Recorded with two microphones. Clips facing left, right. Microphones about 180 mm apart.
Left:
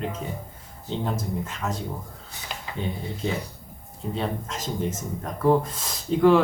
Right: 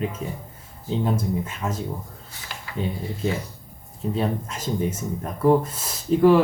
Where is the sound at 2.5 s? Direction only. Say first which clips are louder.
Left 2 dB; 20° left (ahead or behind).